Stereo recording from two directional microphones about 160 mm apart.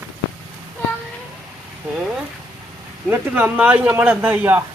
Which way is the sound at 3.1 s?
10° right (ahead or behind).